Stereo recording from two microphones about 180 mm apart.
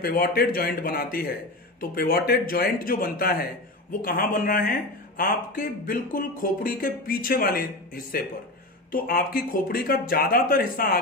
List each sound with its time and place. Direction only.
0.0 s speech: 55° left (ahead or behind)